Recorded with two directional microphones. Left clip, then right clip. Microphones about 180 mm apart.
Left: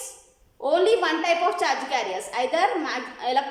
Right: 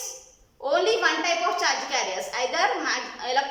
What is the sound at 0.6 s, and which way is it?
A woman's voice, 25° left (ahead or behind).